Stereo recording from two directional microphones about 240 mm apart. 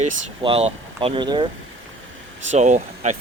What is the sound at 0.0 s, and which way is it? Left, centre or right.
Speech, right.